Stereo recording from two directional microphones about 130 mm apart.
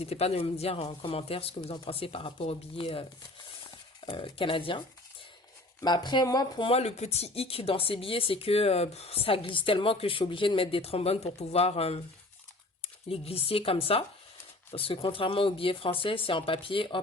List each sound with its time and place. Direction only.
0.0 s speech: 50° left (ahead or behind)
5.8 s speech: 35° left (ahead or behind)
6.7 s speech: 55° left (ahead or behind)